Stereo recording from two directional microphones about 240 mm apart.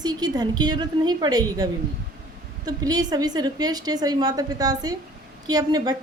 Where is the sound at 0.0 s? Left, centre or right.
Centre.